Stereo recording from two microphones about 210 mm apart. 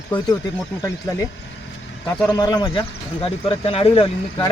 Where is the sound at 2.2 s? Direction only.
20° left (ahead or behind).